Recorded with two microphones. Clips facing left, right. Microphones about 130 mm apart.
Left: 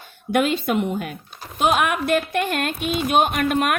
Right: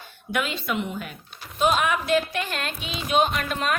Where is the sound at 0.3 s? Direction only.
50° left (ahead or behind).